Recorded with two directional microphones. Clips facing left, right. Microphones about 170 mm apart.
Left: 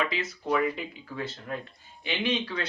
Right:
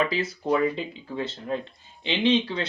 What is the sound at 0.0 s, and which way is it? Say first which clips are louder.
A woman's voice: right 5 dB; 35° right (ahead or behind).